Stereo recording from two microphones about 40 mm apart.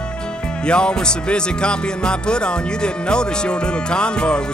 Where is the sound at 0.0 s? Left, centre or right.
Left.